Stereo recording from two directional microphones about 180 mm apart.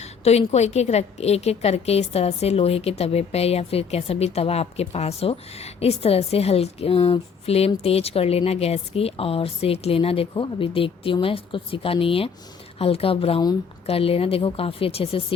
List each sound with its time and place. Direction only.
0.0 s a woman's voice: 35° left (ahead or behind)